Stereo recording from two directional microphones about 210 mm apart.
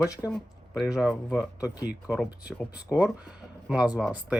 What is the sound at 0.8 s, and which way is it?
Speech, 5° right (ahead or behind).